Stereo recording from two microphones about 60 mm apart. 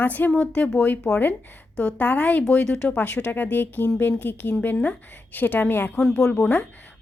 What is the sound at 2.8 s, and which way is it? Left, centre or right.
A woman's voice, left.